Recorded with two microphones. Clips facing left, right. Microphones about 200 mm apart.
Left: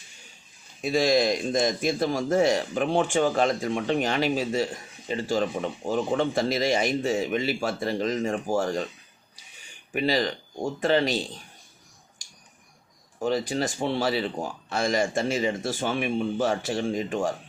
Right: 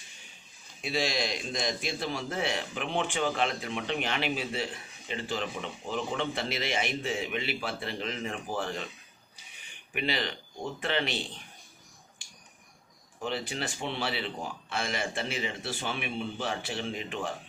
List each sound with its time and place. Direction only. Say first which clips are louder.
0.8 s a man's voice: left 9 dB; 45° left (ahead or behind)
9.9 s a man's voice: left 8 dB; 40° left (ahead or behind)
13.1 s a man's voice: left 8 dB; 40° left (ahead or behind)